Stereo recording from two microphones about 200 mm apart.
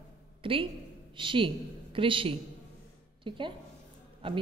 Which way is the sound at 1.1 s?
25° right (ahead or behind).